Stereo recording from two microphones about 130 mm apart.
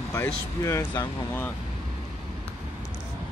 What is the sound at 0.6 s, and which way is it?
Speech, 25° left (ahead or behind).